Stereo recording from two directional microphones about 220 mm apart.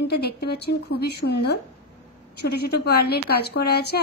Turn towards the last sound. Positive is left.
turn(degrees=45)  # may be behind; listen again after turning